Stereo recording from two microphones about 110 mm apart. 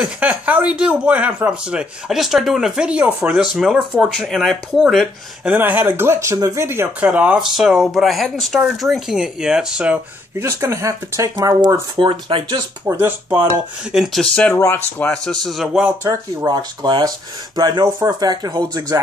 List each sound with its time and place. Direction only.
0.0 s speech: 15° right (ahead or behind)
7.1 s speech: 10° right (ahead or behind)
10.4 s speech: 25° right (ahead or behind)
12.0 s speech: 50° right (ahead or behind)
12.8 s speech: 20° right (ahead or behind)
13.9 s speech: centre (ahead or behind)
14.5 s speech: 25° left (ahead or behind)
15.0 s speech: 5° left (ahead or behind)
16.0 s speech: 30° right (ahead or behind)
16.4 s speech: 40° right (ahead or behind)